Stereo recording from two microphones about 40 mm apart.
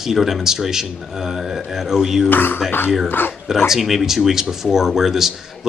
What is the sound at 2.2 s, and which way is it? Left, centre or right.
Speech, left.